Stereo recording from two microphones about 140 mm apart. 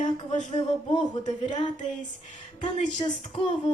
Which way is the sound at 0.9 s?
35° left (ahead or behind).